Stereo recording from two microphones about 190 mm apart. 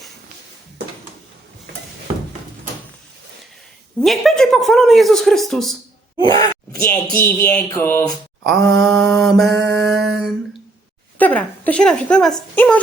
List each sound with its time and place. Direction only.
4.0 s mantra: centre (ahead or behind)
6.3 s speech: 20° left (ahead or behind)
6.7 s speech: 10° left (ahead or behind)
8.4 s mantra: centre (ahead or behind)